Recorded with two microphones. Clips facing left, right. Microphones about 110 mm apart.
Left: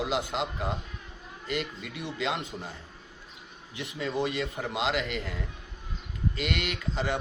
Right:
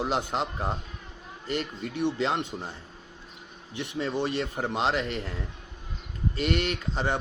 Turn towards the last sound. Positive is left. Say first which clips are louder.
# right 2 dB
turn(degrees=-35)  # may be behind; listen again after turning